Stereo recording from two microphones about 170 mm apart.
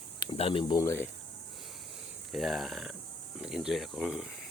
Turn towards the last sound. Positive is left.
turn(degrees=-5)  # may be behind; listen again after turning